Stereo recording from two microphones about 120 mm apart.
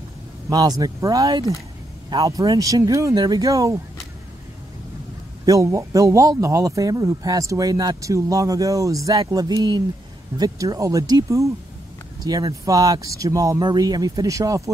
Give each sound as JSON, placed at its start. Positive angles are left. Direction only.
{"t": 0.5, "sound": "a man's voice", "side_deg": -30}
{"t": 5.4, "sound": "a man's voice", "side_deg": -30}